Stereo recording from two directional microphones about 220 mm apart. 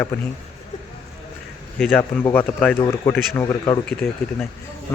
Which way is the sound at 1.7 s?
10° left (ahead or behind).